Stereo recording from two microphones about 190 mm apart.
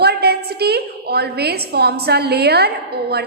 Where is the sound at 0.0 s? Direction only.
60° right (ahead or behind).